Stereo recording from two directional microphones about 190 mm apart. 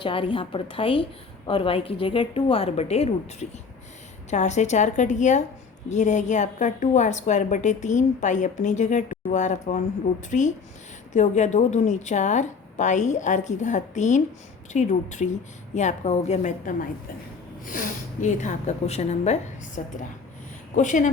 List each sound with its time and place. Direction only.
0.0 s a woman's voice: 25° left (ahead or behind)
4.3 s a woman's voice: 35° left (ahead or behind)